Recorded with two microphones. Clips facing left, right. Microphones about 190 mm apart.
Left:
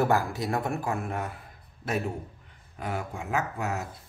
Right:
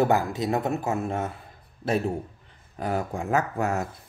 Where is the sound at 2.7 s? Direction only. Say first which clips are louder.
Right 6 dB; 40° right (ahead or behind).